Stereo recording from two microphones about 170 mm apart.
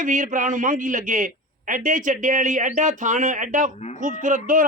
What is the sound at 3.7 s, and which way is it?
Speech, 40° left (ahead or behind).